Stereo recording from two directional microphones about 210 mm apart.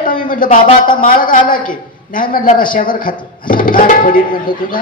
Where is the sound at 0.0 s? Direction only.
40° left (ahead or behind).